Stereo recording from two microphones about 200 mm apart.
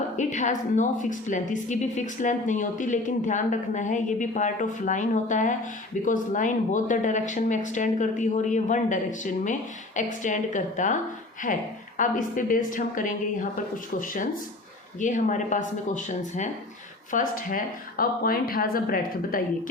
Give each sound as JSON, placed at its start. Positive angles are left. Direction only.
{"t": 0.2, "sound": "a woman's voice", "side_deg": 35}